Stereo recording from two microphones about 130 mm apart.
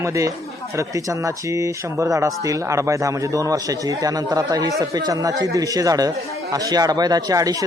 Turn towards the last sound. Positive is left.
turn(degrees=-25)  # may be behind; listen again after turning